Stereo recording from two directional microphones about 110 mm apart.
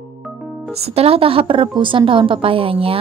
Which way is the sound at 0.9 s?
60° right (ahead or behind).